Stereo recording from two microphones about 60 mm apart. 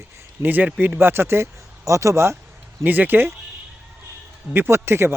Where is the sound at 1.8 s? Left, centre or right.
Right.